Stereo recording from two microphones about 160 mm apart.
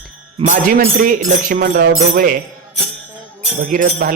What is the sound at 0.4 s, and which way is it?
Speech, 55° right (ahead or behind).